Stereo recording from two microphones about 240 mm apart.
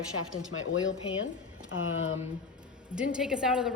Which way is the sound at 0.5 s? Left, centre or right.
Left.